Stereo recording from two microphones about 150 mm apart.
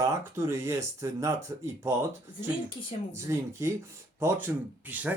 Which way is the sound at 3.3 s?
20° right (ahead or behind).